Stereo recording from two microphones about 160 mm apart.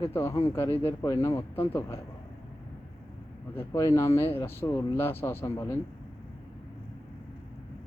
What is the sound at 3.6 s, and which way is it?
Speech, 20° left (ahead or behind).